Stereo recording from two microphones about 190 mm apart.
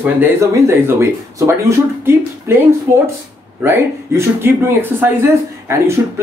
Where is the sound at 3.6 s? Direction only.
15° right (ahead or behind).